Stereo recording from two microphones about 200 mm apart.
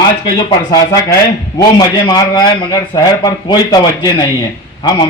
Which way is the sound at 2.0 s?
20° left (ahead or behind).